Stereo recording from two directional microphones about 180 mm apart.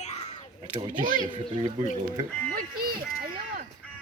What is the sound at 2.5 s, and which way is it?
Music, 55° right (ahead or behind).